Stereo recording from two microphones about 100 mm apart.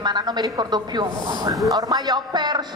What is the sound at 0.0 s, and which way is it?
A woman's voice, 45° right (ahead or behind).